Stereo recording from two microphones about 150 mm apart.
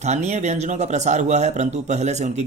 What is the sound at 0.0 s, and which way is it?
Speech, 50° right (ahead or behind).